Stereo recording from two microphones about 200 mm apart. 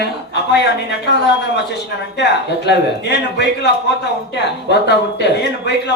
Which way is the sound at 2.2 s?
60° left (ahead or behind).